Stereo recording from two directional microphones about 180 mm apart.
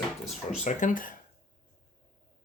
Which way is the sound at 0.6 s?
45° left (ahead or behind).